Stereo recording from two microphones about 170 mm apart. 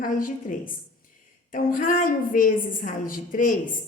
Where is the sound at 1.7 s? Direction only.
50° left (ahead or behind).